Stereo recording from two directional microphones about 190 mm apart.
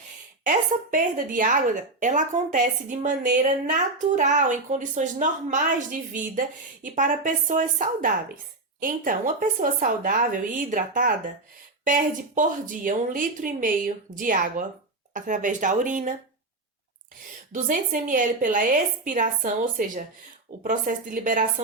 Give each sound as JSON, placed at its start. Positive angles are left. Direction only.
{"t": 0.4, "sound": "a woman's voice", "side_deg": -45}
{"t": 17.5, "sound": "a woman's voice", "side_deg": -45}